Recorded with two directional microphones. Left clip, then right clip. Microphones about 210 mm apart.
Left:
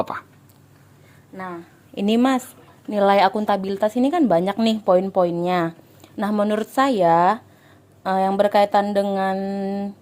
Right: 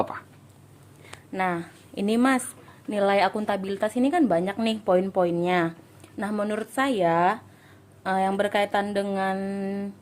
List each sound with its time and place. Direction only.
0.0 s whispering: 30° left (ahead or behind)
2.0 s a woman's voice: 20° left (ahead or behind)